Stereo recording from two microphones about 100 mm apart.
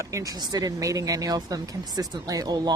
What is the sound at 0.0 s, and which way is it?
Speech, 35° right (ahead or behind).